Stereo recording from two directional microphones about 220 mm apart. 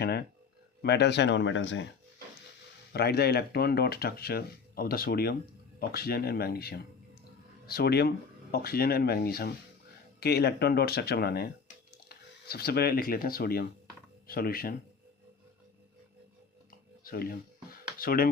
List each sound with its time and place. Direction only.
0.0 s speech: 45° left (ahead or behind)
2.9 s speech: 45° left (ahead or behind)
17.0 s a sound: 40° left (ahead or behind)